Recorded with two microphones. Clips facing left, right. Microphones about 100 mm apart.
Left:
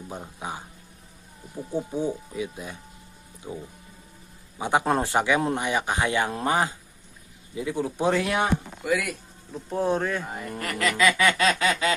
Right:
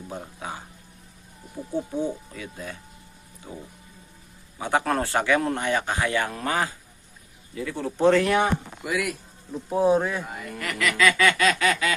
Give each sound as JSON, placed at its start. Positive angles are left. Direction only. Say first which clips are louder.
{"t": 0.1, "sound": "speech", "louder": "even", "side_deg": 15}
{"t": 1.7, "sound": "speech", "louder": "even", "side_deg": 15}
{"t": 4.5, "sound": "speech", "louder": "left 1 dB", "side_deg": 20}
{"t": 8.8, "sound": "speech", "louder": "left 1 dB", "side_deg": 0}
{"t": 10.4, "sound": "speech", "louder": "even", "side_deg": 35}